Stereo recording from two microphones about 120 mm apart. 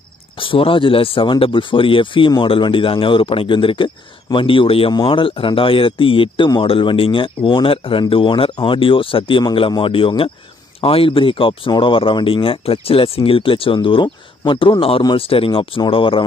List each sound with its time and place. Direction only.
0.4 s speech: 45° left (ahead or behind)